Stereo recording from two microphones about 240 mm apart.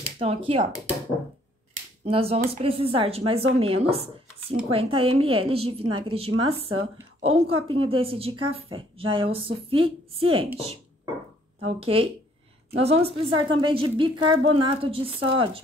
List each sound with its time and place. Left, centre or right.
0.2 s a woman's voice: right
2.0 s a woman's voice: right
11.6 s a woman's voice: right